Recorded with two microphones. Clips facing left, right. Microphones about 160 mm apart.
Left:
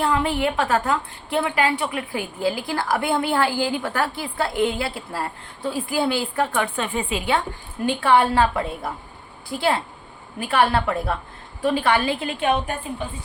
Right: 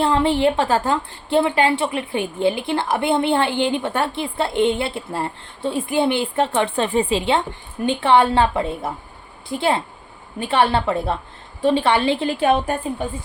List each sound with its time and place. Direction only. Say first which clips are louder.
0.0 s a woman's voice: right 4 dB; 30° right (ahead or behind)